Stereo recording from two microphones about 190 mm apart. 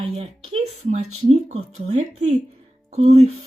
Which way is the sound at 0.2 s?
35° right (ahead or behind).